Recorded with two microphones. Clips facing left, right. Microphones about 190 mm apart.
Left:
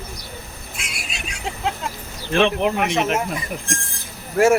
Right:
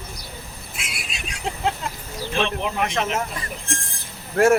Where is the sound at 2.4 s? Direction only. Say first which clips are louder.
Left 7 dB; 60° left (ahead or behind).